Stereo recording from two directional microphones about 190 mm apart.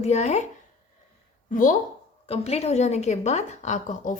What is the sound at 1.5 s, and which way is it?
Speech, 45° left (ahead or behind).